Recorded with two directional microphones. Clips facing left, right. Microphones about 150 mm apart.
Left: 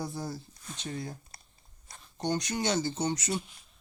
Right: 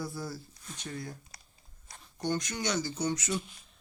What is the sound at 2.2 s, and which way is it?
Speech, 20° left (ahead or behind).